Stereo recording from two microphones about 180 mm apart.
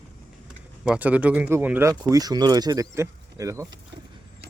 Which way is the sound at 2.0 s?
20° right (ahead or behind).